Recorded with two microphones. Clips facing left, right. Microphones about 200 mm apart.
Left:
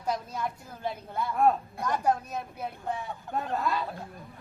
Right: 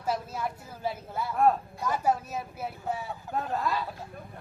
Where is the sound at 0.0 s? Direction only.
5° right (ahead or behind).